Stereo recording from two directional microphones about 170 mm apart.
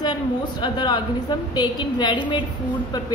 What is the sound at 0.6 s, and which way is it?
A woman's voice, 25° left (ahead or behind).